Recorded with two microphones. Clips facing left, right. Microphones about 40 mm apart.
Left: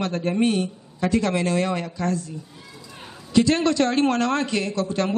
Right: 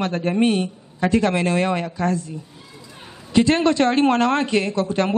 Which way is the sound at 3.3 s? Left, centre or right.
Right.